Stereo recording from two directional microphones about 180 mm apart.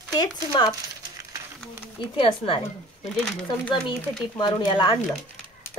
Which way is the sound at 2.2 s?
30° left (ahead or behind).